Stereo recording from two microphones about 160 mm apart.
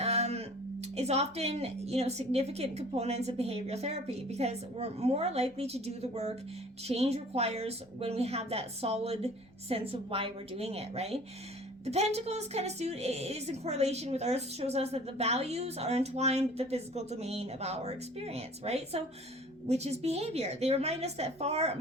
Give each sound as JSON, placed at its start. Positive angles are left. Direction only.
{"t": 0.0, "sound": "a woman's voice", "side_deg": -40}